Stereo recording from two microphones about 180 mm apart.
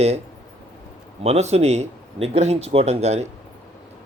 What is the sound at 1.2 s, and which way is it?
Speech, 35° right (ahead or behind).